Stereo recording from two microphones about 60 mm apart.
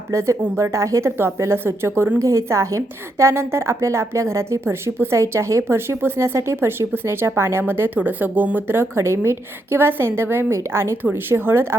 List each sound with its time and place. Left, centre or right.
0.1 s a woman's voice: right
2.1 s a woman's voice: right
7.9 s a woman's voice: right